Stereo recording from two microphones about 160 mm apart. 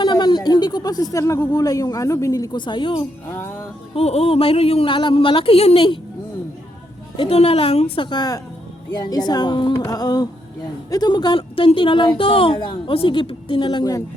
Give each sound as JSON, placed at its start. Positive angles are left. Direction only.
{"t": 0.0, "sound": "speech", "side_deg": 30}
{"t": 3.2, "sound": "music", "side_deg": 15}
{"t": 3.9, "sound": "speech", "side_deg": 40}
{"t": 7.2, "sound": "speech", "side_deg": 40}